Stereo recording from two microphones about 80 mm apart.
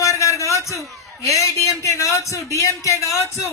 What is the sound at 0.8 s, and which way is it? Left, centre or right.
A man's voice, left.